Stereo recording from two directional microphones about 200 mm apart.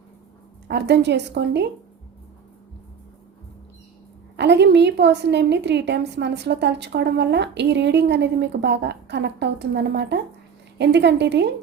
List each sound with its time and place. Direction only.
0.7 s a woman's voice: 60° right (ahead or behind)
4.4 s a woman's voice: 60° right (ahead or behind)